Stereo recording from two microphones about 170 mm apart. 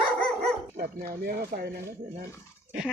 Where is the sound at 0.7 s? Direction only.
60° right (ahead or behind).